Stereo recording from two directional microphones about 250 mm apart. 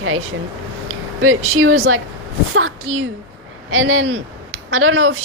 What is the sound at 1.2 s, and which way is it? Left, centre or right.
A woman's voice, right.